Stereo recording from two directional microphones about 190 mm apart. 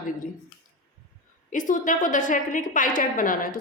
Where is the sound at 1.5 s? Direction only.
45° left (ahead or behind).